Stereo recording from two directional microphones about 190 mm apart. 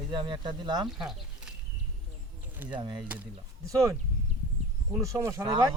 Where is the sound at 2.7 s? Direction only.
25° right (ahead or behind).